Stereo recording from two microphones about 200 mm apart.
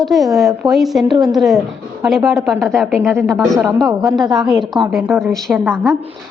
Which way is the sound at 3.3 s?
Centre (ahead or behind).